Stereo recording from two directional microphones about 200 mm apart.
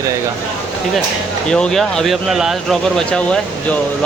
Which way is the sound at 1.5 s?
5° left (ahead or behind).